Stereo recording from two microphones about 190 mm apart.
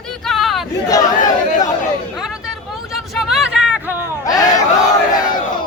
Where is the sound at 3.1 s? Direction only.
Centre (ahead or behind).